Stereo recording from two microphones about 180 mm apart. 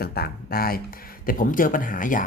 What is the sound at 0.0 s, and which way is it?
Speech, 60° left (ahead or behind).